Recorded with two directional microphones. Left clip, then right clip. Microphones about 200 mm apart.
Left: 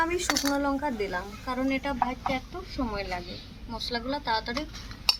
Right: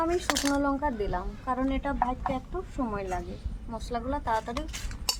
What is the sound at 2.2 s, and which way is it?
Speech, 40° right (ahead or behind).